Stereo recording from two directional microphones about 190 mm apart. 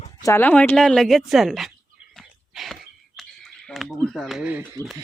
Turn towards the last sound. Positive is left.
turn(degrees=-10)  # may be behind; listen again after turning